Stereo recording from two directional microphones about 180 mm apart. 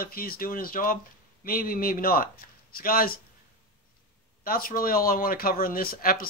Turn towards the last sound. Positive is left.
turn(degrees=55)  # may be behind; listen again after turning